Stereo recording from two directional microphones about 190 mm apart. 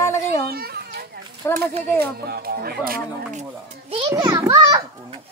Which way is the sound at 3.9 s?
25° right (ahead or behind).